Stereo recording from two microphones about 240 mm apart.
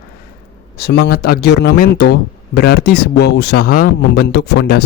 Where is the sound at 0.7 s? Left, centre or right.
Left.